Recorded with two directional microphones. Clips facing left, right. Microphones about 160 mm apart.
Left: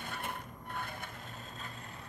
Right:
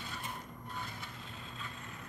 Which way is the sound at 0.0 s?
60° left (ahead or behind).